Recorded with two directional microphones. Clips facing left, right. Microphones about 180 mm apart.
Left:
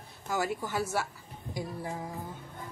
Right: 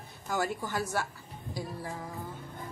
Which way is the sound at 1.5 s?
20° left (ahead or behind).